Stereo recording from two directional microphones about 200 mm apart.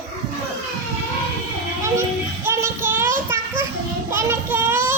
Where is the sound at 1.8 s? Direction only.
10° right (ahead or behind).